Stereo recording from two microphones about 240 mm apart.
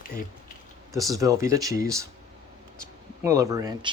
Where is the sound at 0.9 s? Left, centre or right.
Centre.